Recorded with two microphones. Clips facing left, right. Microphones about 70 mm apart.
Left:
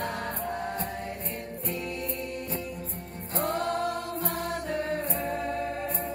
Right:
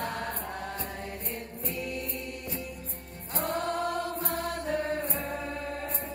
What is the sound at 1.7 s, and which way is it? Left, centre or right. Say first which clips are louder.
Music: left 1 dB; left.